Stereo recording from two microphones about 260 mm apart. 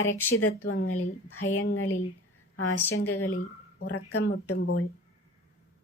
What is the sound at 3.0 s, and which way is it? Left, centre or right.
A woman's voice, left.